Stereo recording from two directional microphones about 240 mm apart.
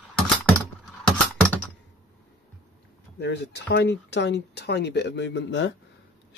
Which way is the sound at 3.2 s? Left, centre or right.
Left.